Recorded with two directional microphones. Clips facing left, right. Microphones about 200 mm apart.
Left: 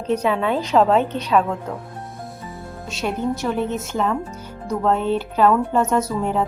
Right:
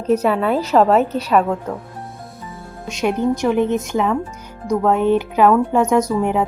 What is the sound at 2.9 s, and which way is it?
Speech, 15° right (ahead or behind).